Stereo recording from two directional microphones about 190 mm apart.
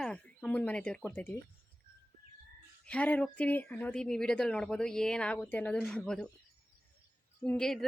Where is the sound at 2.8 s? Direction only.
5° left (ahead or behind).